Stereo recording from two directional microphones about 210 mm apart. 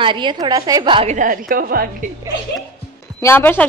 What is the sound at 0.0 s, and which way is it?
A woman's voice, 20° right (ahead or behind).